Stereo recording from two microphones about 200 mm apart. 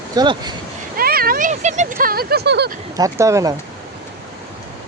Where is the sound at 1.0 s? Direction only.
50° right (ahead or behind).